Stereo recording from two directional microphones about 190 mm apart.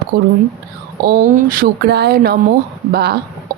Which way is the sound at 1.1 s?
40° right (ahead or behind).